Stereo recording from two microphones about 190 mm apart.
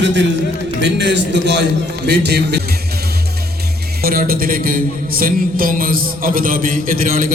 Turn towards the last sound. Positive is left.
turn(degrees=-45)  # may be behind; listen again after turning